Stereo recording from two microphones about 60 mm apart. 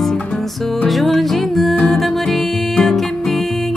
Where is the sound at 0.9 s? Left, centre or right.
Centre.